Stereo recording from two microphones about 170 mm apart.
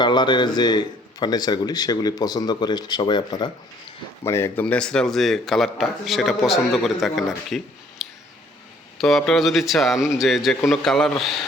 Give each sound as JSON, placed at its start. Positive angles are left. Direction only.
{"t": 0.0, "sound": "a man's voice", "side_deg": 25}
{"t": 4.2, "sound": "a man's voice", "side_deg": 15}
{"t": 9.0, "sound": "a man's voice", "side_deg": 0}